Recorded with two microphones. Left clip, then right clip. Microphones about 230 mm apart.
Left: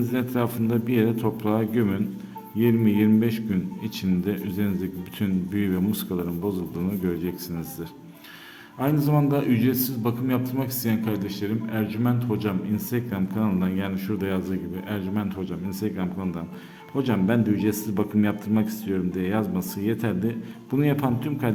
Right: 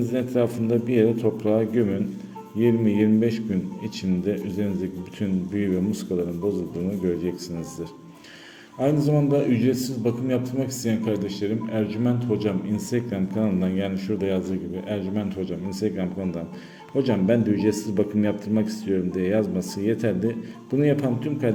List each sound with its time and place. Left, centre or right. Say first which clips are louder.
0.1 s a man's voice: right 3 dB; centre
7.0 s speech: right 4 dB; centre
8.8 s a man's voice: right 2 dB; centre